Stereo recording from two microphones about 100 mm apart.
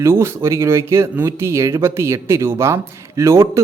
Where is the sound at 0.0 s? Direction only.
25° right (ahead or behind).